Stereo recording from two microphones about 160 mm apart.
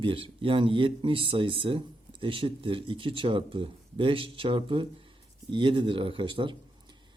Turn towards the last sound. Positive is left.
turn(degrees=-30)  # may be behind; listen again after turning